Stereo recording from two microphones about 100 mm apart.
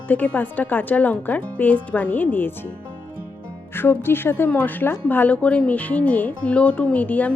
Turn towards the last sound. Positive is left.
turn(degrees=15)  # may be behind; listen again after turning